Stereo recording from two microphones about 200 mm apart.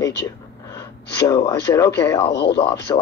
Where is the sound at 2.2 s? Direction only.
55° left (ahead or behind).